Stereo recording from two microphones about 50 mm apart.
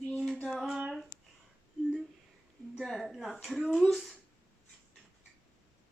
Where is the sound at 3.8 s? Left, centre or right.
Centre.